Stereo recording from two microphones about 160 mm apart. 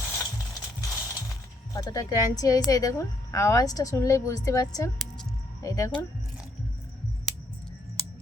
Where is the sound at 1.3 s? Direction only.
20° left (ahead or behind).